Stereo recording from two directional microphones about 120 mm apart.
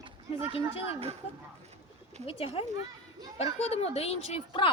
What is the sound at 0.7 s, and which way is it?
Speech, 55° left (ahead or behind).